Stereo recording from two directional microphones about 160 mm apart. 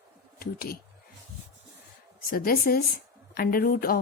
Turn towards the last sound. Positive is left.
turn(degrees=65)  # may be behind; listen again after turning